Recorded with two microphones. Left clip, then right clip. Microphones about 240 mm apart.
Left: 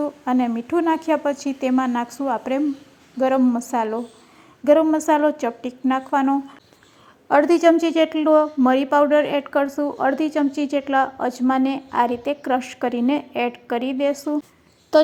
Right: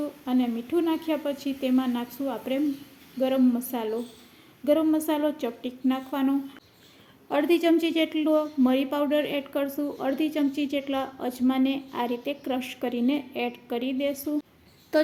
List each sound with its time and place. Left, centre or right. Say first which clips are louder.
0.0 s a woman's voice: left 6 dB; left